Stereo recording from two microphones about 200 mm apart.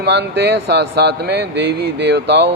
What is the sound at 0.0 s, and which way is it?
Speech, 55° right (ahead or behind).